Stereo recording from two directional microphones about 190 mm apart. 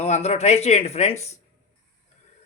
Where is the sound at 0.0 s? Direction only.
35° left (ahead or behind).